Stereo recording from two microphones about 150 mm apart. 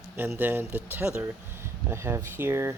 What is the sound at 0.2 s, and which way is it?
Speech, 15° right (ahead or behind).